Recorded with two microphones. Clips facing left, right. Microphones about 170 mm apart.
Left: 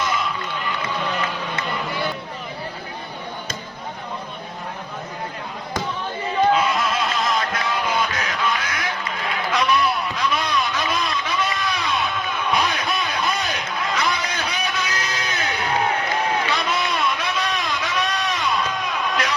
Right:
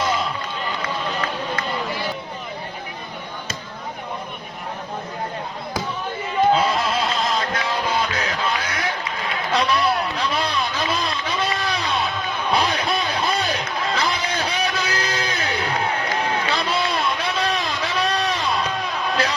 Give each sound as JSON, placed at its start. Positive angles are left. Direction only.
{"t": 0.0, "sound": "run", "side_deg": -30}
{"t": 6.5, "sound": "music", "side_deg": -30}
{"t": 9.5, "sound": "vehicle", "side_deg": -30}
{"t": 12.5, "sound": "music", "side_deg": -30}
{"t": 16.5, "sound": "a sound", "side_deg": -30}